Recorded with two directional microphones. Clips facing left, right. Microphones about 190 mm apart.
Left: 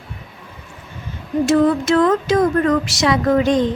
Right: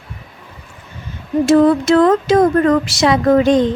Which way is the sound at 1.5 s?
35° right (ahead or behind).